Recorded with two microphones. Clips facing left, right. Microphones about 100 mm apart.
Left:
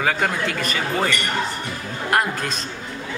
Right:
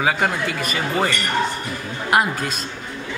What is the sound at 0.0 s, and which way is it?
Speech, 5° right (ahead or behind).